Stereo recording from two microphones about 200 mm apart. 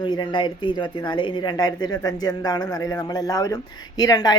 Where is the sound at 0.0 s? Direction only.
20° left (ahead or behind).